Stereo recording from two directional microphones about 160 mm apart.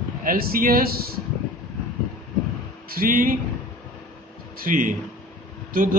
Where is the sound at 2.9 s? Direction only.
60° right (ahead or behind).